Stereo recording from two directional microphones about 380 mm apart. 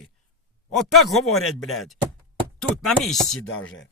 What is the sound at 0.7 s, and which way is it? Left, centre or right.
Speech, centre.